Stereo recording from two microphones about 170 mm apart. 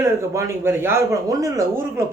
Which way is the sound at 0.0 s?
15° right (ahead or behind).